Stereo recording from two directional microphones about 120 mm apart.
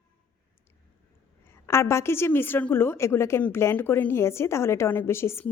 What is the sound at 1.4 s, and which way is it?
A woman's voice, 20° left (ahead or behind).